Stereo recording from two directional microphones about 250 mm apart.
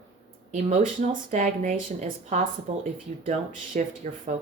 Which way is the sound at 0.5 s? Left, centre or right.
Right.